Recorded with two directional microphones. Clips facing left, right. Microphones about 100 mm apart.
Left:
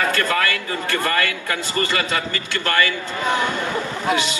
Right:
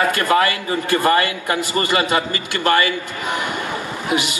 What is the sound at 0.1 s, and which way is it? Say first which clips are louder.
A man's voice: right 4 dB; 20° right (ahead or behind).